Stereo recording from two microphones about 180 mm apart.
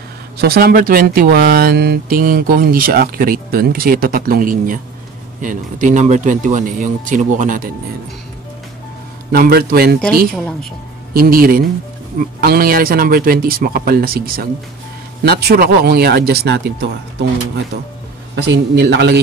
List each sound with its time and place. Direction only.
0.4 s speech: 60° right (ahead or behind)
9.3 s speech: 60° right (ahead or behind)
10.3 s speech: centre (ahead or behind)
11.1 s speech: 55° right (ahead or behind)
18.3 s a man's voice: 70° right (ahead or behind)